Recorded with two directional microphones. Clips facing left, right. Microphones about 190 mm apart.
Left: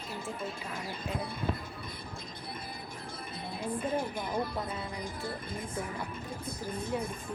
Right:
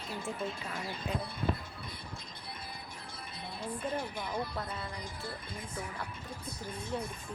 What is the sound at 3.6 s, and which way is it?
Speech, 50° left (ahead or behind).